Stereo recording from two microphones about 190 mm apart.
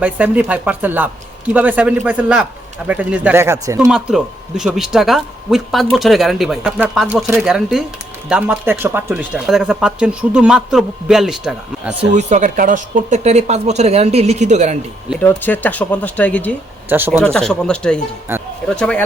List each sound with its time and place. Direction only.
0.0 s a man's voice: 10° right (ahead or behind)
12.1 s speech: 40° right (ahead or behind)
15.2 s speech: 10° left (ahead or behind)